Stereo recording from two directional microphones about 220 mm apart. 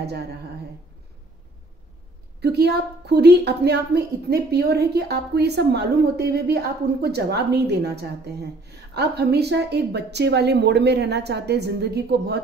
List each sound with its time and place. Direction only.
2.4 s a woman's voice: 50° right (ahead or behind)